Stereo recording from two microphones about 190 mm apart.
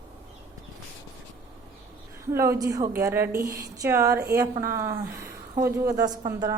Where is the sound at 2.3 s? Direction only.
15° right (ahead or behind).